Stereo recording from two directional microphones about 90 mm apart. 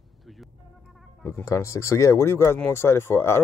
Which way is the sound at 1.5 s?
35° left (ahead or behind).